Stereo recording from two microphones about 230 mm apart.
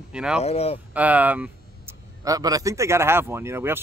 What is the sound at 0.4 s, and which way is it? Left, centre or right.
Speech, left.